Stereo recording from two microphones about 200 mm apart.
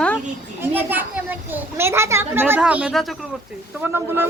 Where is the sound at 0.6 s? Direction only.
10° right (ahead or behind).